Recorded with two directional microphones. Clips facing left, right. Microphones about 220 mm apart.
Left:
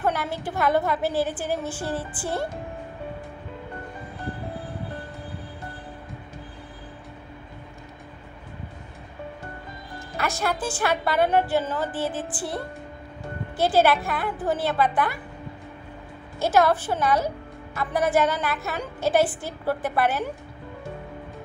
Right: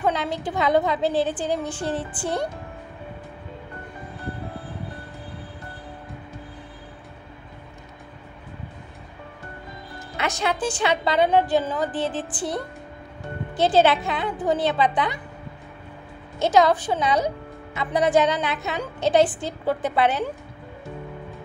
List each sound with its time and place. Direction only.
0.0 s a woman's voice: 20° right (ahead or behind)
9.9 s a woman's voice: 20° right (ahead or behind)
16.3 s a woman's voice: 20° right (ahead or behind)